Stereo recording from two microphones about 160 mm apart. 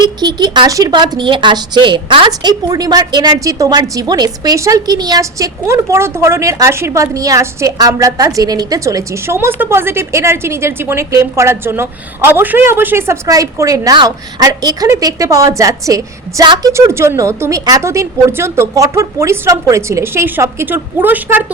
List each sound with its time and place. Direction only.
0.0 s a woman's voice: 25° right (ahead or behind)